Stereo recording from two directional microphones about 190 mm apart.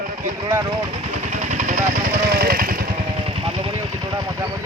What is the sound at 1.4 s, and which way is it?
Vehicle, 40° right (ahead or behind).